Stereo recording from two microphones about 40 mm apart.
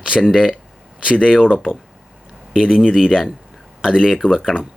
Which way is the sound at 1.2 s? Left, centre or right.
Centre.